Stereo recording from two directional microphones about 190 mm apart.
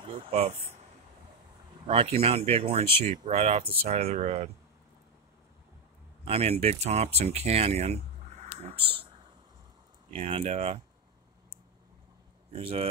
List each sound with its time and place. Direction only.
0.3 s speech: 35° right (ahead or behind)
1.9 s speech: 30° right (ahead or behind)
6.2 s speech: 30° right (ahead or behind)
10.1 s speech: 30° right (ahead or behind)
12.5 s speech: 30° right (ahead or behind)